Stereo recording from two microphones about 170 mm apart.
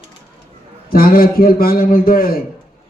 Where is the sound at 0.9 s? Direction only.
60° left (ahead or behind).